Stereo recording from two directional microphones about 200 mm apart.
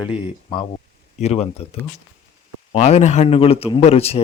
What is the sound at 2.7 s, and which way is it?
Speech, 35° left (ahead or behind).